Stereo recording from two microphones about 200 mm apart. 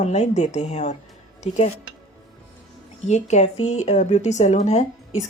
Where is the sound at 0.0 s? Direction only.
35° left (ahead or behind).